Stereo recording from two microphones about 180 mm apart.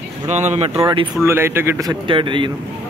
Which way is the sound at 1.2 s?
15° right (ahead or behind).